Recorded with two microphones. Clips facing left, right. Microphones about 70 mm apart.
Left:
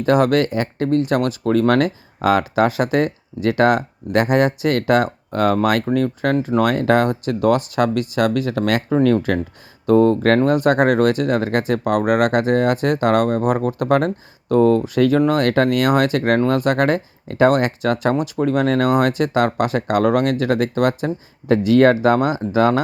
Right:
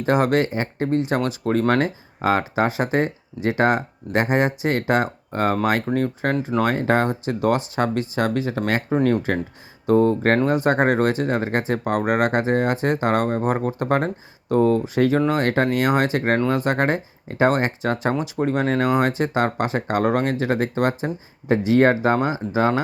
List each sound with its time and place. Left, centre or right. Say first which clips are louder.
0.0 s speech: left 3 dB; left
1.7 s speech: left 3 dB; left
5.9 s speech: left 4 dB; centre
6.6 s speech: left 3 dB; left
9.8 s speech: left 3 dB; left